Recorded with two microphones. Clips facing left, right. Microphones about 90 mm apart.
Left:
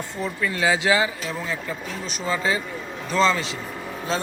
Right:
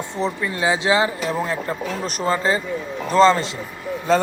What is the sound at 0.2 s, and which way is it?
Speech, 25° right (ahead or behind).